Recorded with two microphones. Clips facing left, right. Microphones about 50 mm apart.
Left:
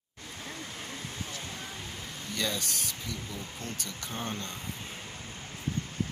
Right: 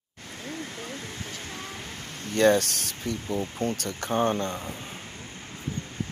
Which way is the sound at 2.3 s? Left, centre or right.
Right.